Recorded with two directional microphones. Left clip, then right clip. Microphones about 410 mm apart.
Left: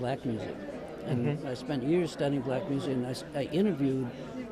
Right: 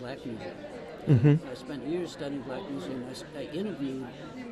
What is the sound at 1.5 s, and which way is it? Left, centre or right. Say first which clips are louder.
Speech: left 4 dB; left.